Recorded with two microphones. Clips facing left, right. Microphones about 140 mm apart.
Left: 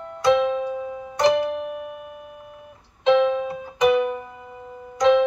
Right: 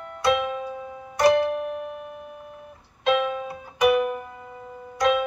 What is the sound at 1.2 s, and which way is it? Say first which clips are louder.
Music: even; 15° left (ahead or behind).